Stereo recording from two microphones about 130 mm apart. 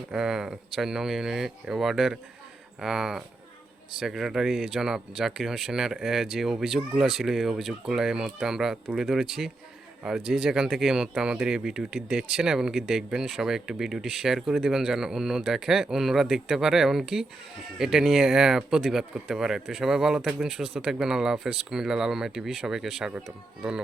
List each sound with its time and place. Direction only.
0.1 s speech: 5° right (ahead or behind)